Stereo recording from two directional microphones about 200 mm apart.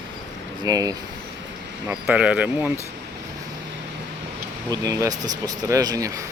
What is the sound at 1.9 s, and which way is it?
Speech, 5° right (ahead or behind).